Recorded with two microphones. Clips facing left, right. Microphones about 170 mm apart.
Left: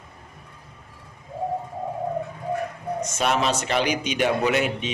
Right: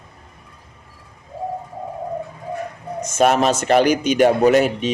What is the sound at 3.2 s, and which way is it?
A man's voice, 45° right (ahead or behind).